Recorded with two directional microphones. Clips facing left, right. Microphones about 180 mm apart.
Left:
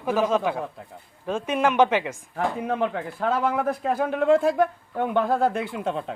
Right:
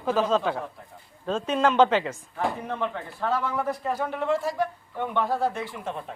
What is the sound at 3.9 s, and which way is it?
Speech, 55° left (ahead or behind).